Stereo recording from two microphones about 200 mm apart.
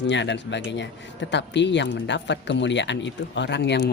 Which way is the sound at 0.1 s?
60° left (ahead or behind).